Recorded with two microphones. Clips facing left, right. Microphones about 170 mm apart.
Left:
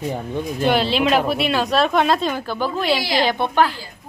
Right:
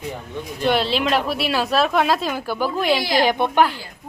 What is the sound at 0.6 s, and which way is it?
A woman's voice, centre (ahead or behind).